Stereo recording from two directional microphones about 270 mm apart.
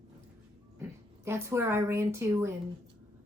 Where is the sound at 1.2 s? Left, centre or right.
Centre.